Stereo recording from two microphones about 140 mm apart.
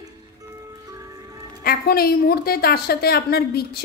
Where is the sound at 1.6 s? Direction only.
90° left.